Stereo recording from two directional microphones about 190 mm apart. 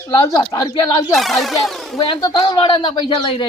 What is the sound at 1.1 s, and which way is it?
Speech, centre (ahead or behind).